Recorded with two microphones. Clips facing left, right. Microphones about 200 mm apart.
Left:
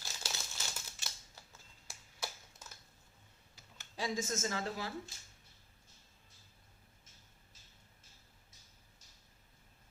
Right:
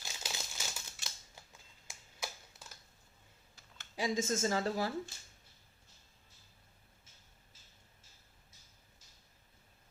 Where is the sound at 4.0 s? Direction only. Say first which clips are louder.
Right 4 dB; 25° right (ahead or behind).